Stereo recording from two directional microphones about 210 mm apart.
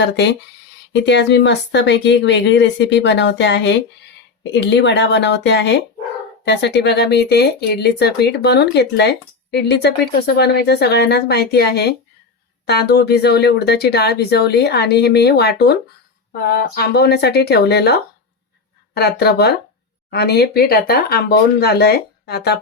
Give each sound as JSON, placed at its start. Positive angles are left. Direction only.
{"t": 0.0, "sound": "speech", "side_deg": 55}